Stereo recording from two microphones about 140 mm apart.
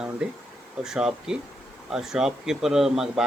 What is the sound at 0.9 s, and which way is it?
A man's voice, 5° right (ahead or behind).